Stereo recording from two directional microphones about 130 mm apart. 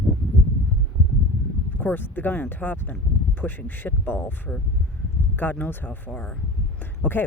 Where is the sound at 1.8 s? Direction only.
15° left (ahead or behind).